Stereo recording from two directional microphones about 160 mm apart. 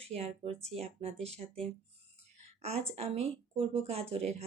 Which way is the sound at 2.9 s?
40° right (ahead or behind).